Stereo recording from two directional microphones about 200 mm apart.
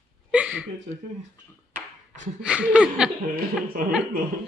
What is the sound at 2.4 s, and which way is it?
Speech, 5° right (ahead or behind).